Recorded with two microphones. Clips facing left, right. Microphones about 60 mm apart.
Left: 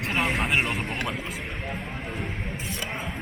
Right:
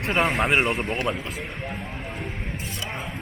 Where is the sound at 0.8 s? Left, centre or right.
Centre.